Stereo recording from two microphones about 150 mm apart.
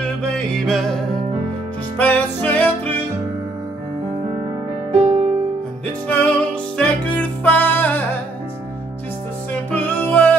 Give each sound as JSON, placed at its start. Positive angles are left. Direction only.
{"t": 0.7, "sound": "music", "side_deg": 0}
{"t": 5.0, "sound": "music", "side_deg": -50}
{"t": 6.0, "sound": "music", "side_deg": 10}
{"t": 9.5, "sound": "music", "side_deg": 10}